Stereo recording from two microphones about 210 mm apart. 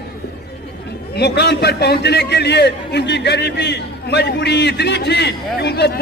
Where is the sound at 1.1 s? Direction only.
50° left (ahead or behind).